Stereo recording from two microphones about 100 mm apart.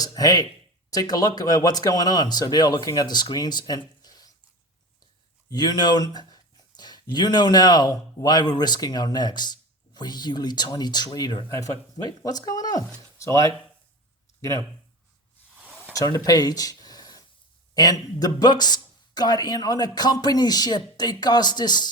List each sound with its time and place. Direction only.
0.0 s speech: 40° left (ahead or behind)
5.5 s speech: 40° left (ahead or behind)
11.4 s speech: 30° left (ahead or behind)
15.5 s a sound: 5° right (ahead or behind)
15.9 s a sound: 35° left (ahead or behind)
17.7 s speech: 40° left (ahead or behind)